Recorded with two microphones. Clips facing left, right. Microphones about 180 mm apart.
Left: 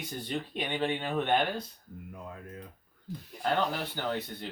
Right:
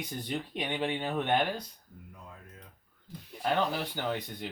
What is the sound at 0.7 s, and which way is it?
Speech, 10° right (ahead or behind).